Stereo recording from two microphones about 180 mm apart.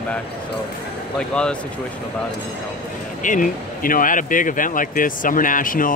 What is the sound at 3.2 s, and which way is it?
Speech, 45° left (ahead or behind).